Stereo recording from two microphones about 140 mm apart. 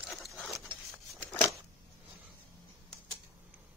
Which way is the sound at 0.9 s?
20° left (ahead or behind).